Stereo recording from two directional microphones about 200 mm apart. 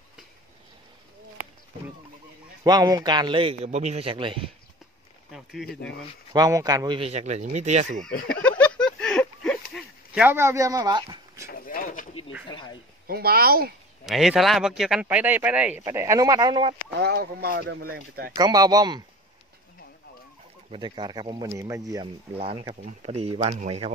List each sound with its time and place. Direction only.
2.6 s a man's voice: 20° right (ahead or behind)
5.3 s a sound: centre (ahead or behind)
5.7 s speech: 60° left (ahead or behind)
6.3 s speech: 20° right (ahead or behind); by 8.0 s 35° right (ahead or behind)
8.3 s a sound: 5° left (ahead or behind)
10.1 s speech: 10° right (ahead or behind)
11.5 s a sound: 45° left (ahead or behind)
12.4 s a sound: 25° left (ahead or behind)
13.0 s speech: 50° right (ahead or behind)
14.0 s a man's voice: centre (ahead or behind); by 16.8 s 25° right (ahead or behind)
17.0 s speech: 55° right (ahead or behind)
18.3 s a man's voice: 20° right (ahead or behind)
20.7 s a man's voice: 25° right (ahead or behind)